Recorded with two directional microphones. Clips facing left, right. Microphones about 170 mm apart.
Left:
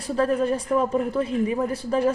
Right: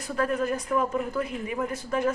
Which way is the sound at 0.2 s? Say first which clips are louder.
Left 4 dB; 30° left (ahead or behind).